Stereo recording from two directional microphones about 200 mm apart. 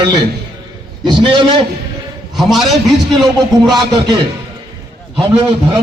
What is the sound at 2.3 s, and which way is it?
Speech, centre (ahead or behind).